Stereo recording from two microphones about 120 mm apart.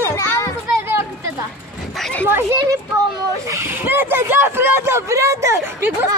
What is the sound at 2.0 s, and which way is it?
Children playing, 5° left (ahead or behind).